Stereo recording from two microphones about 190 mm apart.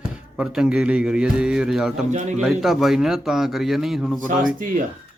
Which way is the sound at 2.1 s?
40° right (ahead or behind).